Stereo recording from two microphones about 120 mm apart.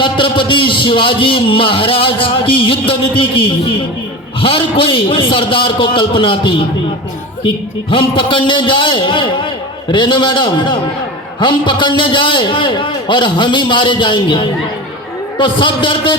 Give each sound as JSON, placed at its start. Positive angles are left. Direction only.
{"t": 0.0, "sound": "a man's voice", "side_deg": 45}